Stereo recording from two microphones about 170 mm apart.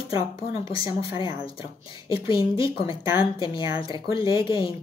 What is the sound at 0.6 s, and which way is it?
Speech, 30° left (ahead or behind).